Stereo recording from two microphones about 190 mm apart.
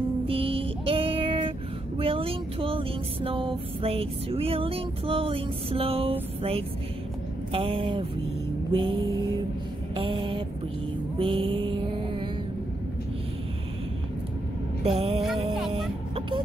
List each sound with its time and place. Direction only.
0.3 s music: 30° right (ahead or behind)
2.0 s a sound: 30° right (ahead or behind)
7.5 s speech: 30° right (ahead or behind)
11.1 s music: 25° right (ahead or behind)
15.0 s music: 30° right (ahead or behind)